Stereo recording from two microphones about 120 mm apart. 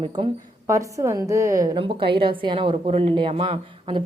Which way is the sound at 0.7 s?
25° right (ahead or behind).